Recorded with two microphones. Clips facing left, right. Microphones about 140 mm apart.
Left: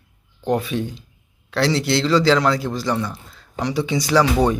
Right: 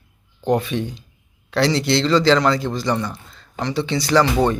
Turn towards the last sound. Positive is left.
turn(degrees=10)  # may be behind; listen again after turning